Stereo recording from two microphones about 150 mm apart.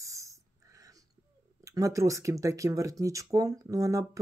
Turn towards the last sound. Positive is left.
turn(degrees=-20)  # may be behind; listen again after turning